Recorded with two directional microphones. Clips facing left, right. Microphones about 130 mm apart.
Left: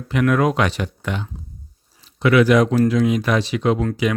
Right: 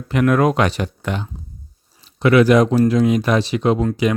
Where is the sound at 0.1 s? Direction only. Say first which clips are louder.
Right 2 dB; 45° right (ahead or behind).